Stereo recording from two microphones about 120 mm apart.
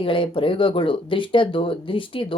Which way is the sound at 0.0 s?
45° left (ahead or behind).